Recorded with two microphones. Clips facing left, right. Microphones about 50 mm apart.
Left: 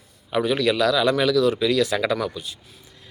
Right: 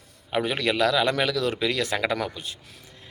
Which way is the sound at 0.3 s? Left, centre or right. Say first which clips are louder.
Left 4 dB; right.